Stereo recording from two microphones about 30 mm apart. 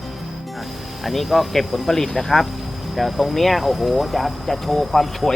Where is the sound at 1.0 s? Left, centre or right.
Centre.